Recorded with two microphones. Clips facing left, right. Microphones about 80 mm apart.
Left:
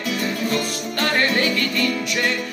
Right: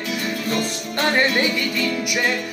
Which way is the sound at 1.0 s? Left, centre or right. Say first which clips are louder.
Right 1 dB; right.